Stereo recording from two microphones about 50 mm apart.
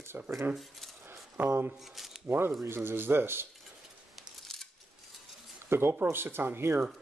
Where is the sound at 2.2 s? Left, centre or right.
Right.